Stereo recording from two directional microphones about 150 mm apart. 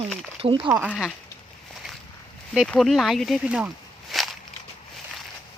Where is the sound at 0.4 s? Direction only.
35° right (ahead or behind).